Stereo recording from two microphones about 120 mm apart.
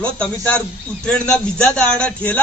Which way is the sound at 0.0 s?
10° left (ahead or behind).